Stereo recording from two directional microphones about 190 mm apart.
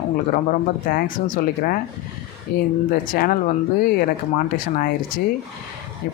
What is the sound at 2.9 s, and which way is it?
Speech, 50° left (ahead or behind).